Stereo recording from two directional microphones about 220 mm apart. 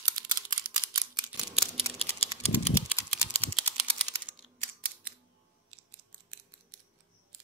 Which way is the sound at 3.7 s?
25° right (ahead or behind).